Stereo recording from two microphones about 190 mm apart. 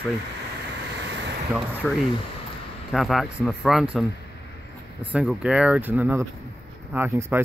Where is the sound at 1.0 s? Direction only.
65° right (ahead or behind).